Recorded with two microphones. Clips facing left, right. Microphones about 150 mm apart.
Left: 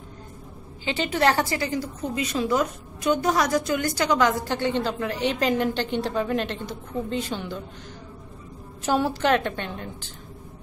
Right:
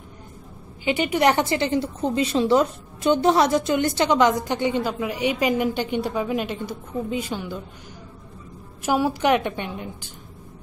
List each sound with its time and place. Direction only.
0.8 s a woman's voice: 15° right (ahead or behind)
8.8 s a woman's voice: 10° right (ahead or behind)